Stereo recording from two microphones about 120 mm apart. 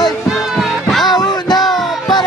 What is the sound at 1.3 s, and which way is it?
Music, 35° left (ahead or behind).